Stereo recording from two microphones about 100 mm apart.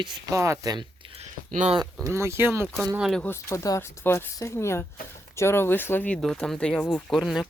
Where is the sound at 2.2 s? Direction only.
25° right (ahead or behind).